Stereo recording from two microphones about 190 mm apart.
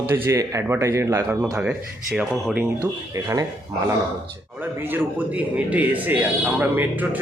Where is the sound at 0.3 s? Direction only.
15° right (ahead or behind).